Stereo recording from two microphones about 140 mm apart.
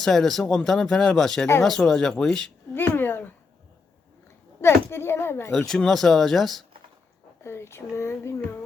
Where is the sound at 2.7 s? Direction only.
15° left (ahead or behind).